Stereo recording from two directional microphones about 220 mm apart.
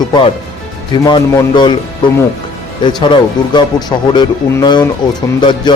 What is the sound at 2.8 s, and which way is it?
Speech, 20° left (ahead or behind).